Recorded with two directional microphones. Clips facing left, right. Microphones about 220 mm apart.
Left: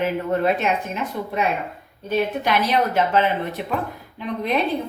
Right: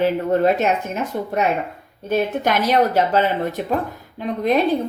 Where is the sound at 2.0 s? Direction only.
45° right (ahead or behind).